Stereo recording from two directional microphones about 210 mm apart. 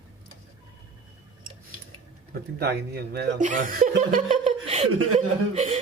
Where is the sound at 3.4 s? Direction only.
35° right (ahead or behind).